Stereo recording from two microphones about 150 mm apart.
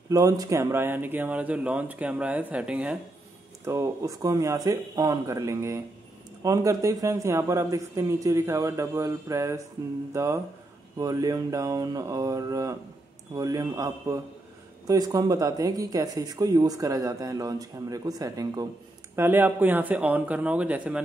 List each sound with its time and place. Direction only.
0.1 s speech: 25° right (ahead or behind); by 3.0 s 5° right (ahead or behind)
3.6 s speech: 20° right (ahead or behind)